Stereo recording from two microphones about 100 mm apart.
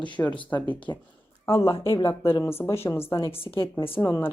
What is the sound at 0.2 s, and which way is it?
Speech, 20° left (ahead or behind).